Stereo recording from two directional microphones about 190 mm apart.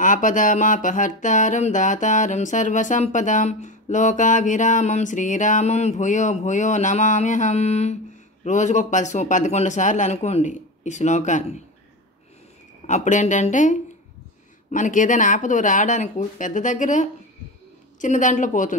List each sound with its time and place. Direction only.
0.0 s speech: 40° left (ahead or behind)
12.8 s a woman's voice: 40° left (ahead or behind)